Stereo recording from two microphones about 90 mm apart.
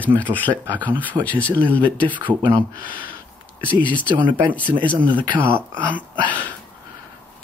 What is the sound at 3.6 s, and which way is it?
Speech, 15° left (ahead or behind).